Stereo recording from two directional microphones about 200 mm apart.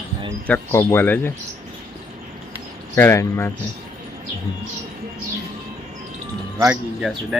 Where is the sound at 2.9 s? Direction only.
15° left (ahead or behind).